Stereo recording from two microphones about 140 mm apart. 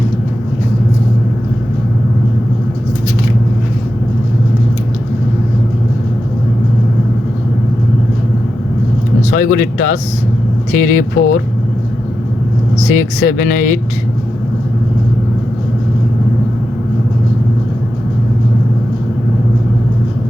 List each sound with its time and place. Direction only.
9.3 s speech: 80° left
13.0 s speech: 80° left